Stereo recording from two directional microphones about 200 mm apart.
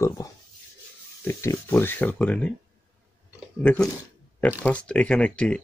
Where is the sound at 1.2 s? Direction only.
15° left (ahead or behind).